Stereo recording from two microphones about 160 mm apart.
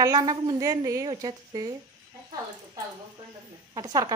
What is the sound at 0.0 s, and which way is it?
Speech, 20° right (ahead or behind).